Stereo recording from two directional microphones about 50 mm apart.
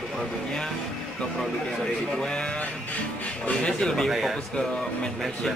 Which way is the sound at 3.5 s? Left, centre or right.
Centre.